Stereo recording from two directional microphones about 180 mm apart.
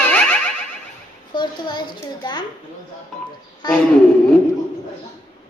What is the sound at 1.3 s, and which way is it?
A woman's voice, 25° left (ahead or behind).